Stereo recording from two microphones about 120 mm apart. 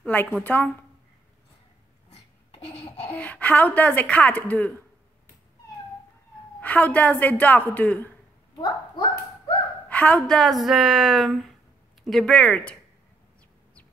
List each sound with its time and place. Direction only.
0.0 s a woman's voice: 15° left (ahead or behind)
2.5 s baby laughter: 50° left (ahead or behind)
3.1 s a woman's voice: 10° left (ahead or behind)
6.6 s a woman's voice: 15° left (ahead or behind)
8.5 s dog: 35° left (ahead or behind)
9.8 s a woman's voice: 10° left (ahead or behind)